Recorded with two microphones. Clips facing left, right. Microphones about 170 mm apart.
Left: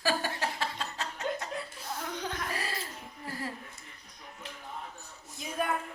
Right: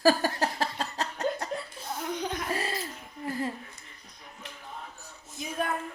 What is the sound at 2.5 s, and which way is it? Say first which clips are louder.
Chuckle: right 5 dB; 25° right (ahead or behind).